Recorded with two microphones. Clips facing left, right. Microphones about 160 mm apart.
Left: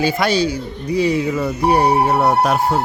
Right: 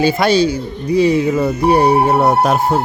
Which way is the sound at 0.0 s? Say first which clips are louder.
Right 4 dB; 25° right (ahead or behind).